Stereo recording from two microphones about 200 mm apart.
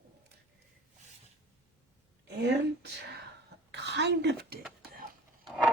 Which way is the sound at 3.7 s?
60° right (ahead or behind).